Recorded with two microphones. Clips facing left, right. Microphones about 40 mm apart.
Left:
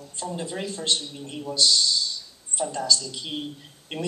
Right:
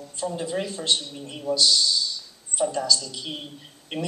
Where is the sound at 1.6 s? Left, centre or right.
Right.